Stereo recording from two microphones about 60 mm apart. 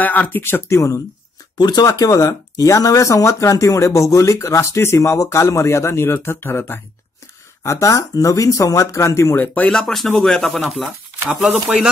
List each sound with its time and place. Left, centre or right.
0.0 s speech: left
0.7 s speech: left
1.8 s speech: left
7.6 s speech: left
9.3 s speech: left
9.7 s speech: centre